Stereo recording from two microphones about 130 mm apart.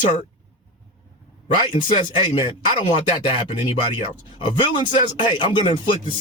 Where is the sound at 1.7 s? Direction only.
40° left (ahead or behind).